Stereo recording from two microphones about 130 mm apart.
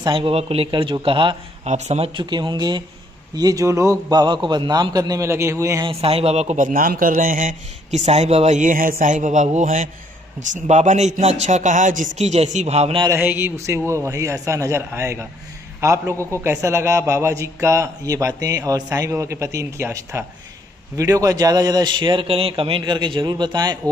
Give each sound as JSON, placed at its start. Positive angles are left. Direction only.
{"t": 0.0, "sound": "speech", "side_deg": -40}
{"t": 0.7, "sound": "a man's voice", "side_deg": -40}
{"t": 1.6, "sound": "speech", "side_deg": -60}
{"t": 2.1, "sound": "a man's voice", "side_deg": -35}
{"t": 5.9, "sound": "a man's voice", "side_deg": -50}
{"t": 9.0, "sound": "a man's voice", "side_deg": -75}
{"t": 13.1, "sound": "a man's voice", "side_deg": -15}